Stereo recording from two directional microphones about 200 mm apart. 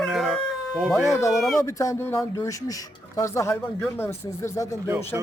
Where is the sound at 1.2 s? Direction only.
15° left (ahead or behind).